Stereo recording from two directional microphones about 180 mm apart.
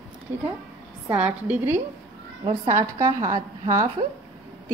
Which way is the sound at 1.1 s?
10° right (ahead or behind).